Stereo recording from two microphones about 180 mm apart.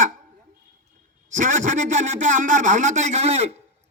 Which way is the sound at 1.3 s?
45° right (ahead or behind).